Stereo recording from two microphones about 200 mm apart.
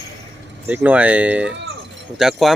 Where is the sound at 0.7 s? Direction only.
10° right (ahead or behind).